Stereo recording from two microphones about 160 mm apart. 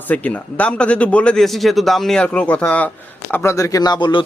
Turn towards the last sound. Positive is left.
turn(degrees=30)  # may be behind; listen again after turning